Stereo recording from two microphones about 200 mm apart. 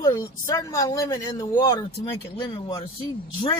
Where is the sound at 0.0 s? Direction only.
20° left (ahead or behind).